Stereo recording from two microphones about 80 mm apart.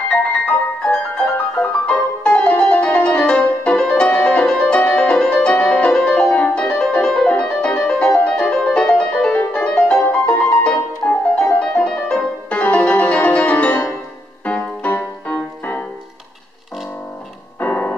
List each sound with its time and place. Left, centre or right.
0.8 s music: centre
17.6 s music: left